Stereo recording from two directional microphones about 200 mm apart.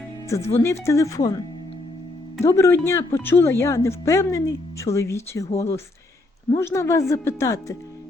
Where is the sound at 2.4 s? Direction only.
15° left (ahead or behind).